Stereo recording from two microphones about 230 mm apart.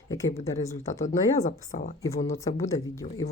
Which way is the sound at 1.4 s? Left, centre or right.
Left.